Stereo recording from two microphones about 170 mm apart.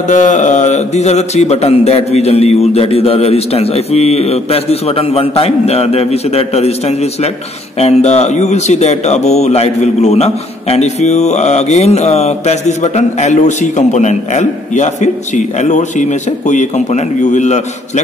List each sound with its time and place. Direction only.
0.1 s speech: 45° left (ahead or behind)